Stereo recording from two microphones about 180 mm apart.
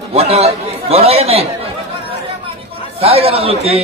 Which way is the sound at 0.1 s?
35° right (ahead or behind).